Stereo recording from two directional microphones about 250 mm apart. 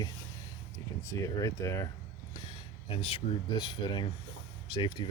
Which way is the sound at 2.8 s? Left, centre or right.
Left.